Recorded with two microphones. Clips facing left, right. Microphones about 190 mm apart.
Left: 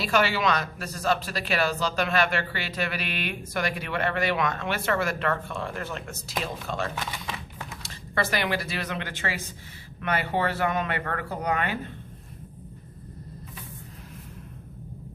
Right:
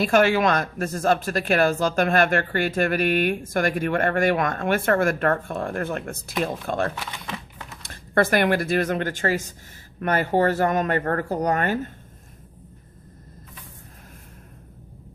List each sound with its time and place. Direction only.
0.0 s speech: 50° right (ahead or behind)